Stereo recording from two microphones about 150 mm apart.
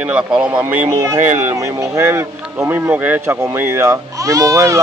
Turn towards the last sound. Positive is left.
turn(degrees=-20)  # may be behind; listen again after turning